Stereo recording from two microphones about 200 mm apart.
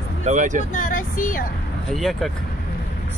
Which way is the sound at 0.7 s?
40° left (ahead or behind).